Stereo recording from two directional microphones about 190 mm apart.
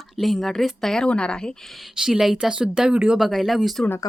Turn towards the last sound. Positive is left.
turn(degrees=0)  # may be behind; listen again after turning